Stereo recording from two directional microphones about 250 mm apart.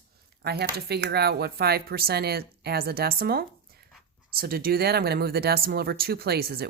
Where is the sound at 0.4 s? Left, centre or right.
Right.